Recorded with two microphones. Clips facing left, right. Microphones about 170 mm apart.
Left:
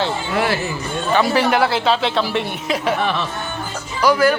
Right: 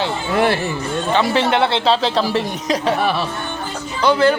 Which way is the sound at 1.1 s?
25° right (ahead or behind).